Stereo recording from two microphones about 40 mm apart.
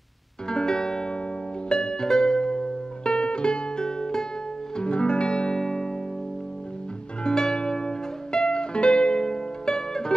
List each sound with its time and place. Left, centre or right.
0.5 s music: centre
7.2 s music: centre